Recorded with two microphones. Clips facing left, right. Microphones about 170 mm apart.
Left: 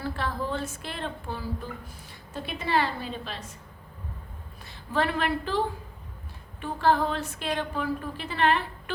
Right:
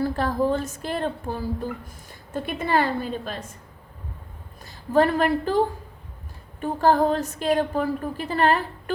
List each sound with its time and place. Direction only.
0.0 s a sound: 45° right (ahead or behind)
0.8 s a woman's voice: 45° right (ahead or behind)
4.6 s a woman's voice: 40° right (ahead or behind)